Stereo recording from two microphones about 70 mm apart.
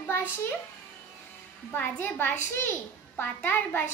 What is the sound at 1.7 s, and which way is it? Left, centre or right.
A child's voice, left.